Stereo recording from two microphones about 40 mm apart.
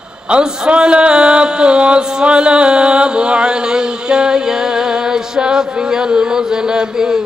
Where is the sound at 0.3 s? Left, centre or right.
Right.